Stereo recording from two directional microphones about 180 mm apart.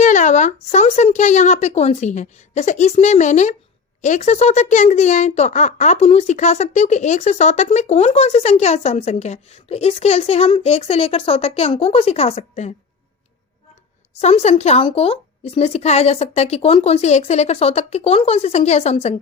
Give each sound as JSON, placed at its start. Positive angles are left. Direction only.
{"t": 0.0, "sound": "speech", "side_deg": 40}
{"t": 14.2, "sound": "speech", "side_deg": 40}